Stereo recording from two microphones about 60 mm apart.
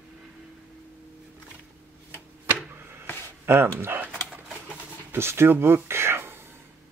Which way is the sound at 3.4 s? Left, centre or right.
Right.